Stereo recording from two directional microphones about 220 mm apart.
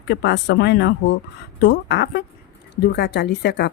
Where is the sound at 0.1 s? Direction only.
50° left (ahead or behind).